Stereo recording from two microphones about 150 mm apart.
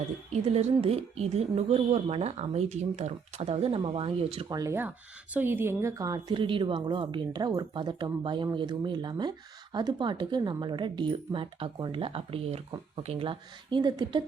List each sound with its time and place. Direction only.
0.4 s speech: 45° right (ahead or behind)
4.5 s speech: 20° right (ahead or behind)